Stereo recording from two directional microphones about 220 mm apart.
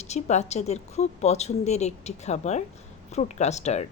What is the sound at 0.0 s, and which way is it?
A woman's voice, 30° left (ahead or behind).